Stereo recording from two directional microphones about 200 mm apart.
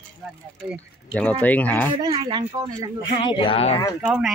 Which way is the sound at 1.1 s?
5° left (ahead or behind).